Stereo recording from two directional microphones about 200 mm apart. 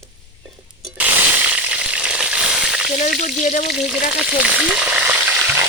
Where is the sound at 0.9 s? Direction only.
5° right (ahead or behind).